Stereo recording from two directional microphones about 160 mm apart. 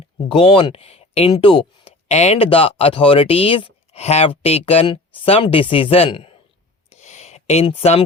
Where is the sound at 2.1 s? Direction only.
45° left (ahead or behind).